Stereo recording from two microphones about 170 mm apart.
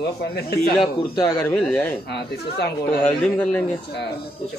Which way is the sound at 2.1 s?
70° left (ahead or behind).